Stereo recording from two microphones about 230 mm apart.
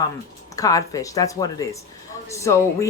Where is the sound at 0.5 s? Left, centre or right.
Centre.